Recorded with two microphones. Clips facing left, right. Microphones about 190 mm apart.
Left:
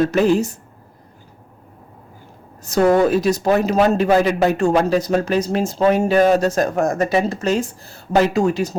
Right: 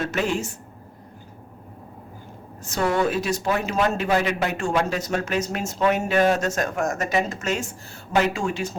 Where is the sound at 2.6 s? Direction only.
40° left (ahead or behind).